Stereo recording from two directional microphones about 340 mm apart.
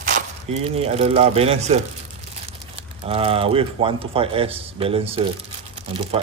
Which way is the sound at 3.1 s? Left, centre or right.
Centre.